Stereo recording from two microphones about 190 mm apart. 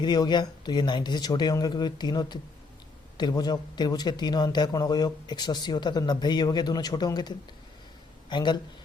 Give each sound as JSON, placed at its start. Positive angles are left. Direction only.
{"t": 0.0, "sound": "speech", "side_deg": 25}